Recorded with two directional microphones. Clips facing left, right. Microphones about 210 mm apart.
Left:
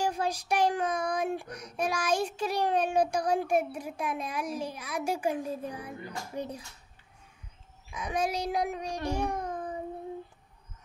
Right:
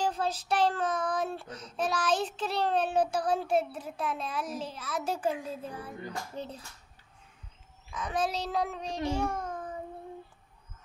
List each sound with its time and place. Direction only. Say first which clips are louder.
0.0 s child singing: left 1 dB; 10° left (ahead or behind)
7.9 s a child's voice: left 1 dB; 10° left (ahead or behind)